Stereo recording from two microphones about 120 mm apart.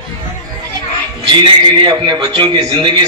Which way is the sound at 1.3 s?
40° right (ahead or behind).